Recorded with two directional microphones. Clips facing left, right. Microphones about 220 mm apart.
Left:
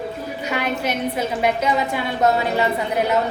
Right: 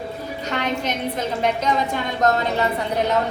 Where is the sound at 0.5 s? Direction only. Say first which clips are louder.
Left 1 dB; 10° left (ahead or behind).